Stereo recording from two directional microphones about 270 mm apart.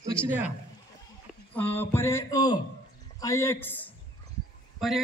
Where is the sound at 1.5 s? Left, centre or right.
Centre.